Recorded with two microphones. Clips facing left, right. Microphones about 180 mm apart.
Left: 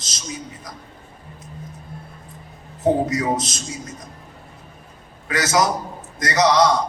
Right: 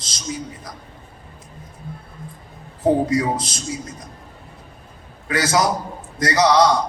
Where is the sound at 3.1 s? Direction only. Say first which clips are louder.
Right 2 dB; 30° right (ahead or behind).